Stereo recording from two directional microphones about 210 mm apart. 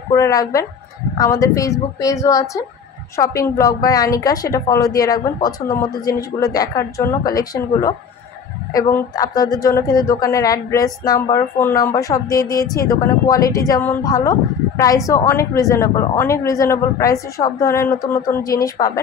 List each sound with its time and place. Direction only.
0.1 s a woman's voice: 15° left (ahead or behind)